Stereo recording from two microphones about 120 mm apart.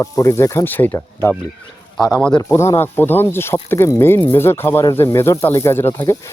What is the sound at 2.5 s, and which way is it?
Speech, 20° left (ahead or behind).